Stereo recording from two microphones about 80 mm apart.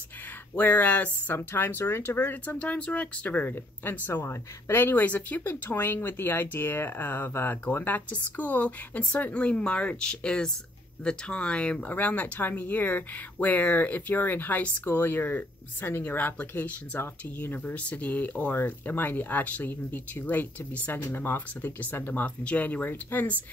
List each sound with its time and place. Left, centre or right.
0.6 s speech: left